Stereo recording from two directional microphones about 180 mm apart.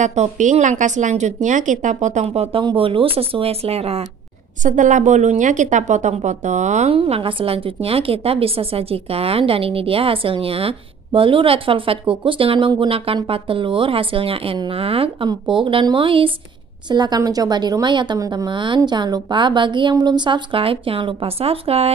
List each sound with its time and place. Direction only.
0.0 s a woman's voice: 40° right (ahead or behind)